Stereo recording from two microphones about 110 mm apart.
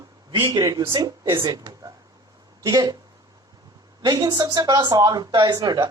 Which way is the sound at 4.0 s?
40° right (ahead or behind).